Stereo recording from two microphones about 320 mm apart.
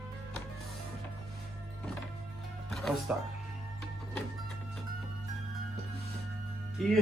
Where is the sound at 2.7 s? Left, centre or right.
Centre.